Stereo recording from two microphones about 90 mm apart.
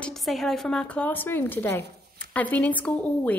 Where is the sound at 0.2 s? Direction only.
Centre (ahead or behind).